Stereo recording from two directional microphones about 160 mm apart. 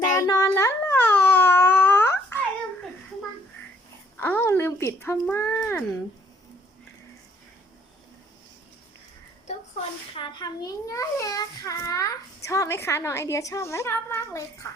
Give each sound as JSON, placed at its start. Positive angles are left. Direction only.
{"t": 0.1, "sound": "a sound", "side_deg": 20}
{"t": 4.2, "sound": "speech", "side_deg": 15}
{"t": 10.2, "sound": "a child's voice", "side_deg": 25}